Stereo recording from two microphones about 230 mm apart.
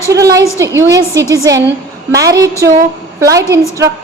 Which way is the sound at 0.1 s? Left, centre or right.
Centre.